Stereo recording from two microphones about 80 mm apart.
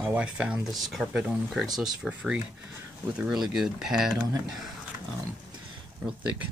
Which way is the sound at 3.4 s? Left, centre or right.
Centre.